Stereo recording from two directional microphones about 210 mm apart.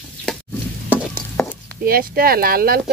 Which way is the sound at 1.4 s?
Centre (ahead or behind).